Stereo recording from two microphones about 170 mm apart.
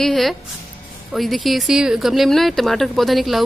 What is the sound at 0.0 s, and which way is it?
Speech, centre (ahead or behind).